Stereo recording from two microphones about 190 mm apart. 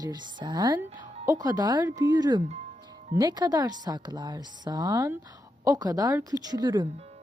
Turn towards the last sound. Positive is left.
turn(degrees=-20)  # may be behind; listen again after turning